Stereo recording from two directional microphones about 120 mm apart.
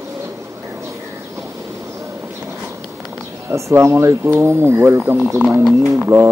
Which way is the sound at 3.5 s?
25° right (ahead or behind).